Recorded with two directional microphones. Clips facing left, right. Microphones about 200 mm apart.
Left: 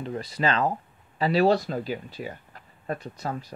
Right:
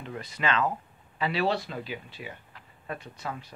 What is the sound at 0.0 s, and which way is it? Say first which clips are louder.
Speech: left 5 dB; 35° left (ahead or behind).